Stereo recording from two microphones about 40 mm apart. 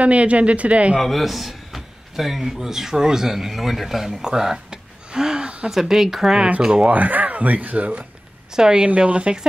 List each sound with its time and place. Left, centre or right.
0.0 s speech: right
1.0 s speech: centre
5.7 s speech: centre
6.9 s speech: right
8.5 s speech: centre
8.8 s speech: right